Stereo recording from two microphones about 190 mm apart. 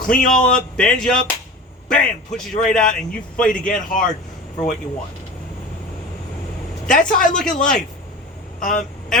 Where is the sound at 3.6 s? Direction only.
45° left (ahead or behind).